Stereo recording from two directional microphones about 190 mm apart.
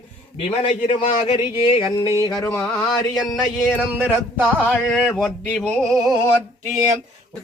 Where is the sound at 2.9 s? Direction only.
20° left (ahead or behind).